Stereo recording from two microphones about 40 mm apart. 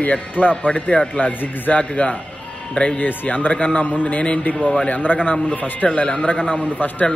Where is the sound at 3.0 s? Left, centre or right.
Left.